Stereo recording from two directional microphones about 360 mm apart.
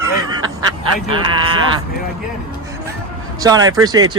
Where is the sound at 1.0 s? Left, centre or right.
Centre.